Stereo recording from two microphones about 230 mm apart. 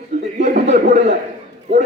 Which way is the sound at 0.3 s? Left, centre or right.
Right.